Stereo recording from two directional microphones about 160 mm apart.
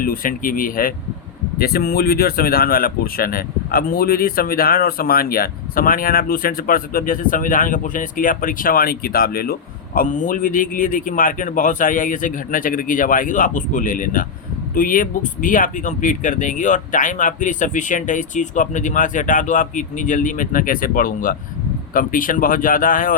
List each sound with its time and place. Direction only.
0.0 s speech: 65° left (ahead or behind)
1.5 s speech: 70° left (ahead or behind)